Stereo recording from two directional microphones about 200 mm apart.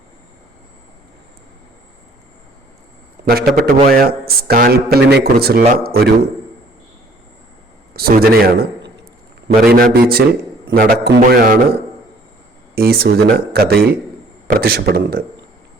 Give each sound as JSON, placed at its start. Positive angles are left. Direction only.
{"t": 3.2, "sound": "a man's voice", "side_deg": -50}
{"t": 7.9, "sound": "a man's voice", "side_deg": -50}
{"t": 12.7, "sound": "a man's voice", "side_deg": -50}